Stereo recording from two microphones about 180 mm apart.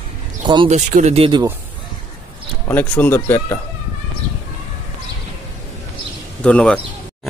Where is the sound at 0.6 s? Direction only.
40° right (ahead or behind).